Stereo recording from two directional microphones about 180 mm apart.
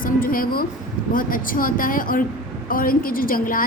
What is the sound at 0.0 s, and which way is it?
A woman's voice, 50° left (ahead or behind).